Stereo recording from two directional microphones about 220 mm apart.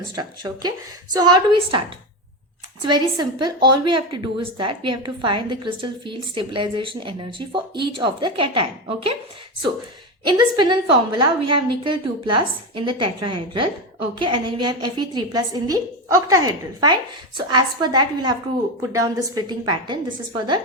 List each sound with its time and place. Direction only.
0.2 s a woman's voice: 20° right (ahead or behind)
2.8 s a woman's voice: 20° right (ahead or behind)
10.2 s a woman's voice: 20° right (ahead or behind)